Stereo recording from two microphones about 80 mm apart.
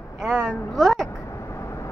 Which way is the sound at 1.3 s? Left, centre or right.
Left.